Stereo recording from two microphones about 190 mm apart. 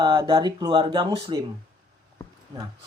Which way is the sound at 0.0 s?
25° right (ahead or behind).